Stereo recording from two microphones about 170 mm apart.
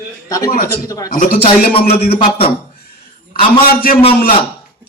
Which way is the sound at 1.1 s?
50° left (ahead or behind).